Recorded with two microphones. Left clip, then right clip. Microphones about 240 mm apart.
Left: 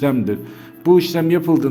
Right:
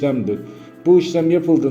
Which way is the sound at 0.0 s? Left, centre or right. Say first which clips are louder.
Left 1 dB; left.